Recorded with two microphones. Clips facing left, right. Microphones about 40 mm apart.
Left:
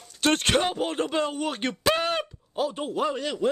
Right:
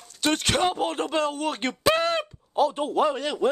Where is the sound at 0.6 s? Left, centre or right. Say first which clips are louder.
Right 2 dB; centre.